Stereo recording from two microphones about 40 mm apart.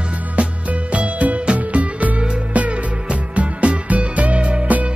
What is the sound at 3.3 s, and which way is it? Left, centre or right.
Music, right.